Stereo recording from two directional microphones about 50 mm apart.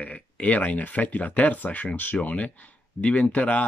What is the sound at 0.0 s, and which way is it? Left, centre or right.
Speech, left.